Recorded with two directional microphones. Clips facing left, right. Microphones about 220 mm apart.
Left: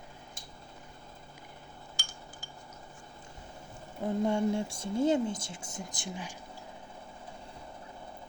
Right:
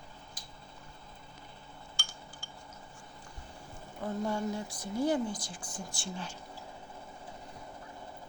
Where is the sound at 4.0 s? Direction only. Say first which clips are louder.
Left 5 dB; 20° left (ahead or behind).